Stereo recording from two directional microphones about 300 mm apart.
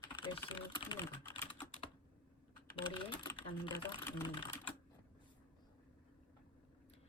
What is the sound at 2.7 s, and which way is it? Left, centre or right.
Typing, centre.